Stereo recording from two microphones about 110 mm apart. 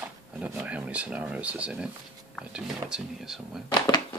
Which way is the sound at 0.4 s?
15° right (ahead or behind).